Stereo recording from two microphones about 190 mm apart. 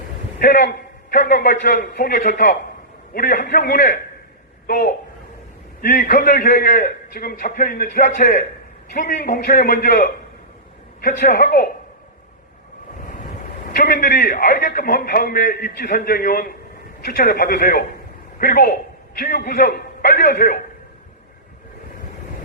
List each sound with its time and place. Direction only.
0.3 s a man's voice: 55° left (ahead or behind)
1.1 s a man's voice: 45° left (ahead or behind)
13.7 s a man's voice: 50° left (ahead or behind)